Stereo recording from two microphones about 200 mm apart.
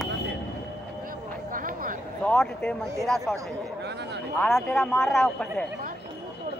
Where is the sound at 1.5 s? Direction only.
45° right (ahead or behind).